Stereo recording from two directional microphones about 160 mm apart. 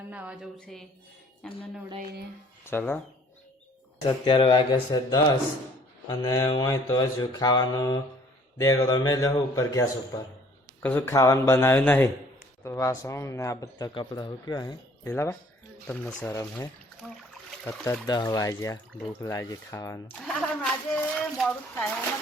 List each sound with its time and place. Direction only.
0.1 s music: 10° right (ahead or behind)
0.6 s speech: centre (ahead or behind)
2.6 s speech: 15° left (ahead or behind)
4.0 s speech: 30° left (ahead or behind)
15.1 s speech: 15° left (ahead or behind)
16.3 s speech: 20° left (ahead or behind)
17.0 s speech: 5° left (ahead or behind)
18.0 s speech: 25° left (ahead or behind)
20.2 s speech: 5° left (ahead or behind)